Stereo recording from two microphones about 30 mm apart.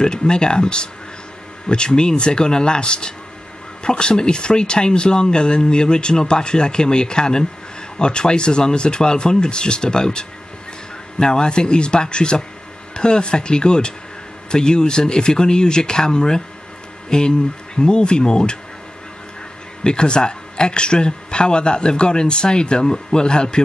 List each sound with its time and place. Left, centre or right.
0.0 s speech: left
19.8 s speech: left